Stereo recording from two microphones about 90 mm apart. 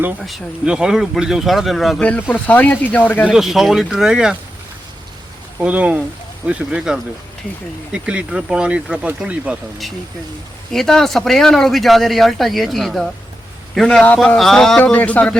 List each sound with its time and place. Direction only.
0.2 s speech: centre (ahead or behind)
2.0 s speech: 15° left (ahead or behind)
3.2 s speech: 5° right (ahead or behind)
5.5 s speech: 15° right (ahead or behind)
10.7 s speech: 5° left (ahead or behind)
14.9 s speech: 15° left (ahead or behind)